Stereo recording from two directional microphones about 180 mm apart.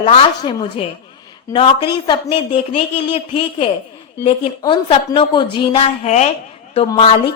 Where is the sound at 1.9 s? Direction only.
25° left (ahead or behind).